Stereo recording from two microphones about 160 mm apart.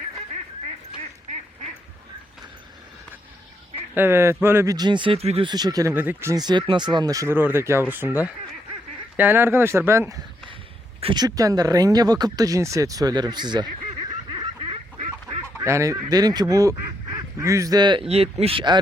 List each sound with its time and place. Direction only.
3.9 s speech: 15° right (ahead or behind); by 5.5 s 40° right (ahead or behind)
5.5 s speech: 25° right (ahead or behind)
5.9 s speech: 10° right (ahead or behind)
11.0 s speech: 25° right (ahead or behind)
14.3 s a sound: 30° right (ahead or behind)
15.5 s speech: 15° right (ahead or behind)
18.1 s speech: 40° right (ahead or behind)